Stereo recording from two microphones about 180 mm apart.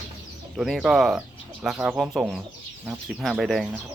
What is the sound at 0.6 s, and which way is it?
Speech, centre (ahead or behind).